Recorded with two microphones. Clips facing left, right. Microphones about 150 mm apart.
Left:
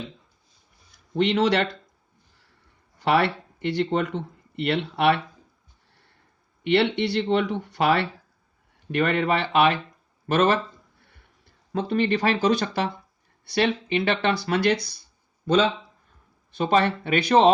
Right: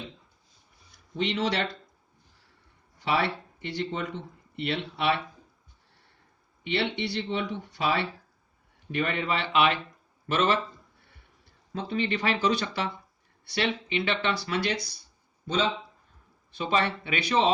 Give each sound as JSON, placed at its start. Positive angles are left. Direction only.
{"t": 1.1, "sound": "speech", "side_deg": 65}
{"t": 3.0, "sound": "speech", "side_deg": 65}
{"t": 6.7, "sound": "speech", "side_deg": 60}
{"t": 11.7, "sound": "speech", "side_deg": 55}
{"t": 12.1, "sound": "speech", "side_deg": 40}
{"t": 16.5, "sound": "speech", "side_deg": 45}